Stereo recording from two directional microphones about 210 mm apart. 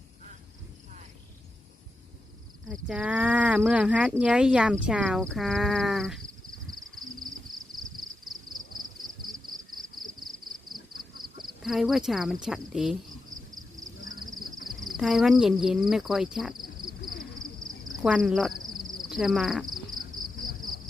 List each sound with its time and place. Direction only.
2.8 s speech: 5° right (ahead or behind)
6.7 s a sound: 20° right (ahead or behind)
10.8 s quack: 20° right (ahead or behind)
11.6 s speech: centre (ahead or behind)
14.8 s speech: centre (ahead or behind)
17.4 s a sound: 40° right (ahead or behind)
18.0 s speech: 5° right (ahead or behind)
18.6 s cricket: 40° right (ahead or behind)
19.0 s speech: centre (ahead or behind)